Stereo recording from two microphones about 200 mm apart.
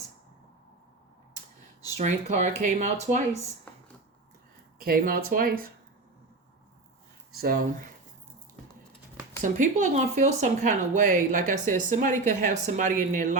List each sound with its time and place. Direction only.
2.0 s speech: 35° right (ahead or behind)
4.8 s speech: 45° right (ahead or behind)
7.3 s speech: 50° right (ahead or behind)
9.4 s speech: 40° right (ahead or behind)